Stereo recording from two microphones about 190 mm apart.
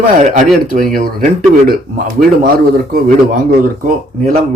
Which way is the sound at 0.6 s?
45° right (ahead or behind).